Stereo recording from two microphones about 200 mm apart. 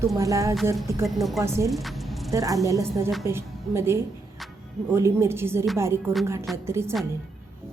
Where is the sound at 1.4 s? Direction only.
15° right (ahead or behind).